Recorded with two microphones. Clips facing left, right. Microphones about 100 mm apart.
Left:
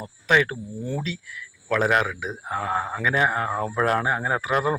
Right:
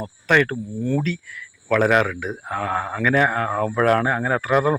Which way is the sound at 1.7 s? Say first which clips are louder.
Right 4 dB; 10° left (ahead or behind).